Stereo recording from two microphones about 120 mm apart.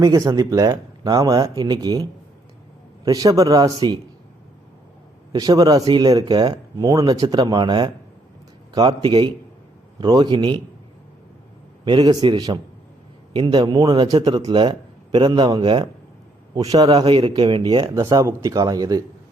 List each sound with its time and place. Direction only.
0.0 s a man's voice: 30° right (ahead or behind)
5.3 s a man's voice: 35° right (ahead or behind)
11.9 s a man's voice: 40° right (ahead or behind)
17.9 s speech: 25° right (ahead or behind)